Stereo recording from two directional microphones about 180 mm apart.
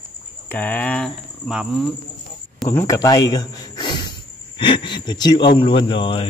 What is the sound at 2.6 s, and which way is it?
Speech, 15° left (ahead or behind).